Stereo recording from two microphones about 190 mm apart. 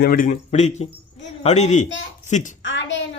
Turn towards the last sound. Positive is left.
turn(degrees=70)  # may be behind; listen again after turning